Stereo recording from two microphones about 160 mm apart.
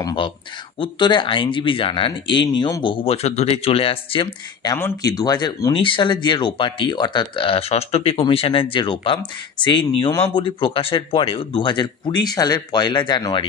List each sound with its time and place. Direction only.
0.0 s speech: 30° left (ahead or behind)
4.7 s speech: 20° left (ahead or behind)